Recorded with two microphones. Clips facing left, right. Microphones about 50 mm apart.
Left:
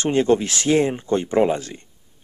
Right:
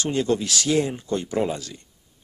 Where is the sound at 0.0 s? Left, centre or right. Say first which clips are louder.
Left 5 dB; left.